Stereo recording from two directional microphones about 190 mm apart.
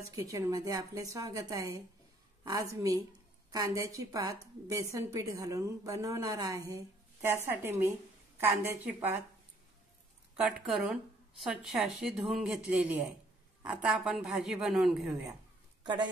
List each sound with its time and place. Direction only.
0.1 s a woman's voice: 15° right (ahead or behind)
10.7 s a woman's voice: centre (ahead or behind)